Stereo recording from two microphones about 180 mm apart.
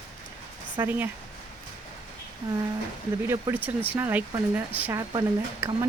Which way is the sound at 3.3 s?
15° right (ahead or behind).